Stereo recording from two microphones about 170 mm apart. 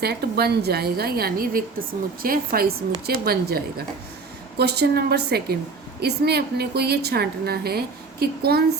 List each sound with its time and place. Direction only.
0.0 s a woman's voice: 70° right (ahead or behind)
4.5 s a woman's voice: 75° right (ahead or behind)